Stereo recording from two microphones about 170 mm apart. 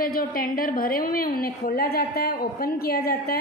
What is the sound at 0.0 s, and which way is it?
A woman's voice, 55° left (ahead or behind).